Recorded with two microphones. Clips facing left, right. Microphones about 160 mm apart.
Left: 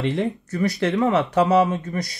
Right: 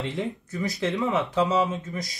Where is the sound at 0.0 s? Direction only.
75° left (ahead or behind).